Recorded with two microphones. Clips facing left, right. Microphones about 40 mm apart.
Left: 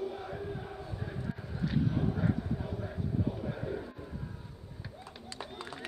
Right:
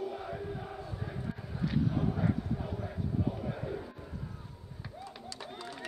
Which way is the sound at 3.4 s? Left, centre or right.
Centre.